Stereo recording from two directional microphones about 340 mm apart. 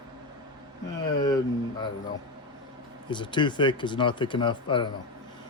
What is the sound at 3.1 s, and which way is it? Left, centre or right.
Speech, centre.